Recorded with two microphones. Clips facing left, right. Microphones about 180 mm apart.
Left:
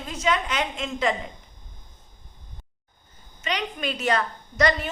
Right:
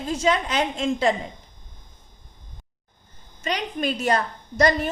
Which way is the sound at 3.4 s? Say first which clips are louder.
Right 3 dB; 40° right (ahead or behind).